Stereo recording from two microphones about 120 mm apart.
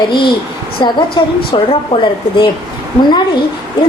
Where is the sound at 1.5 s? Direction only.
50° left (ahead or behind).